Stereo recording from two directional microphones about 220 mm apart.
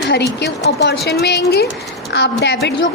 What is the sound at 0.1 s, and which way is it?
A woman's voice, 50° left (ahead or behind).